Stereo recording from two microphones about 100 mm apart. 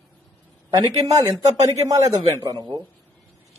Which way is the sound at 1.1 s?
40° right (ahead or behind).